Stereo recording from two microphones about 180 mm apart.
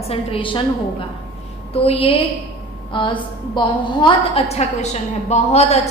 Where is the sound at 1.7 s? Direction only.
35° left (ahead or behind).